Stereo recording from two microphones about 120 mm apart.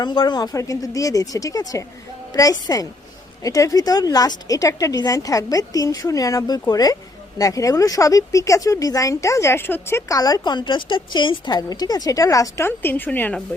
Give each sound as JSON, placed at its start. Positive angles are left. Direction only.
{"t": 0.0, "sound": "a woman's voice", "side_deg": 40}